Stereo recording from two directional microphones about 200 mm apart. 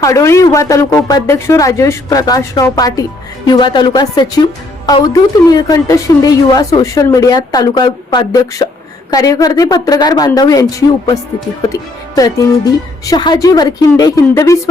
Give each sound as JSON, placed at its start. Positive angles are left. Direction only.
{"t": 0.0, "sound": "a woman's voice", "side_deg": 15}